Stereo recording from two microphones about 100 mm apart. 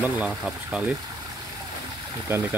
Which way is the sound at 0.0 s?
10° right (ahead or behind).